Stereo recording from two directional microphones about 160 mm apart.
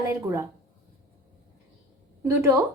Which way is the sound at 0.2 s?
15° right (ahead or behind).